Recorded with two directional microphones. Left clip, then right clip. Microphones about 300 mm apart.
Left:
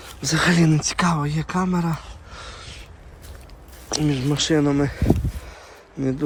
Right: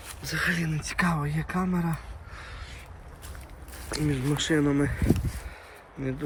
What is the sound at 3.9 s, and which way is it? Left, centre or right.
Speech, centre.